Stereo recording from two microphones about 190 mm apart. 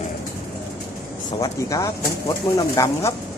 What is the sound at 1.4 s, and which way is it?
Speech, 15° left (ahead or behind).